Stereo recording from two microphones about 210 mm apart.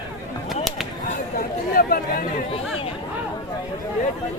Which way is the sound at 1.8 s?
45° left (ahead or behind).